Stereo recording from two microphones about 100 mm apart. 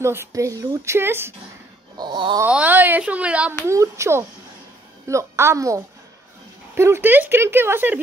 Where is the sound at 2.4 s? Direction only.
15° right (ahead or behind).